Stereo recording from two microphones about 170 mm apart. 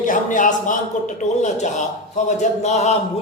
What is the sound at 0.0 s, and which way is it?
A man's voice, 50° left (ahead or behind).